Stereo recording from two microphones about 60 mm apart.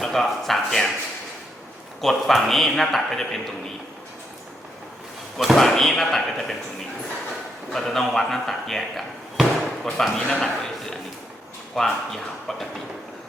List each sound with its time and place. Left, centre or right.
0.0 s a man's voice: centre
2.0 s a man's voice: centre
5.4 s a man's voice: centre
7.7 s a man's voice: centre